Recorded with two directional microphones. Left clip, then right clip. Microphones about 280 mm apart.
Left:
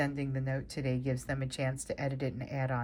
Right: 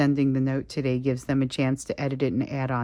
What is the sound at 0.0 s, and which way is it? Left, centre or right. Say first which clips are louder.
Speech: right 11 dB; centre.